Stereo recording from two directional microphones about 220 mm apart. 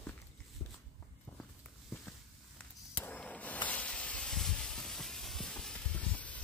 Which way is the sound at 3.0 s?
5° left (ahead or behind).